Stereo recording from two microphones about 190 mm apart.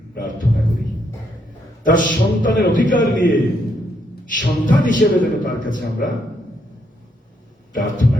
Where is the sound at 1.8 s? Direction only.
45° left (ahead or behind).